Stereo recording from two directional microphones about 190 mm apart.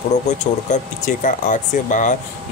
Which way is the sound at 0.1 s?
40° left (ahead or behind).